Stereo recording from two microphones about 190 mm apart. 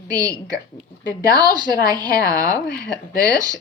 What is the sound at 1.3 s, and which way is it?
A woman's voice, 20° right (ahead or behind).